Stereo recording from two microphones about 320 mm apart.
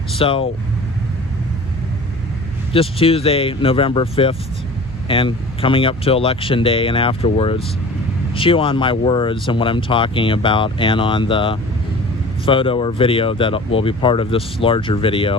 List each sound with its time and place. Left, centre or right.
0.2 s speech: centre
2.7 s speech: centre